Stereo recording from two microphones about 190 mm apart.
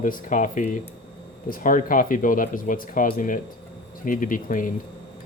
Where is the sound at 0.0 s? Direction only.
45° left (ahead or behind).